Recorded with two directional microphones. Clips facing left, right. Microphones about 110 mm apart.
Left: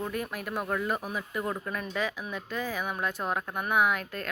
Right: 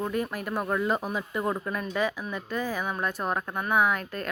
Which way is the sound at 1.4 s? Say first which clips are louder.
Right 4 dB; 30° right (ahead or behind).